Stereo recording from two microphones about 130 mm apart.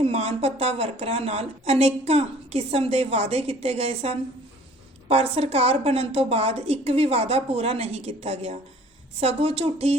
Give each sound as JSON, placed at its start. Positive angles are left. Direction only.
{"t": 0.0, "sound": "a woman's voice", "side_deg": -50}